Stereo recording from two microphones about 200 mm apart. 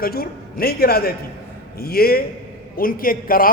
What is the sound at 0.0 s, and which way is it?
A man's voice, 50° left (ahead or behind).